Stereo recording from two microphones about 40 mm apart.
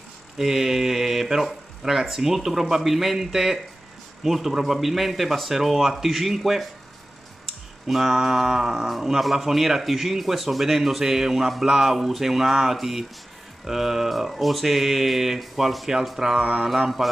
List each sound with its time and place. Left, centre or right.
0.4 s speech: centre
7.8 s a man's voice: centre